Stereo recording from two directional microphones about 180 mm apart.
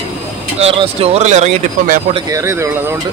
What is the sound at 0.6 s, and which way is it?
Speech, 35° right (ahead or behind).